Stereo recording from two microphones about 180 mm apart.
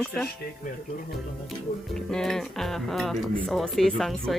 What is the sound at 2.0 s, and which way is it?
Speech, 5° left (ahead or behind).